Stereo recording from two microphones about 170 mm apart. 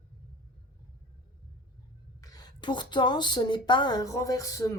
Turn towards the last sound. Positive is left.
turn(degrees=20)  # may be behind; listen again after turning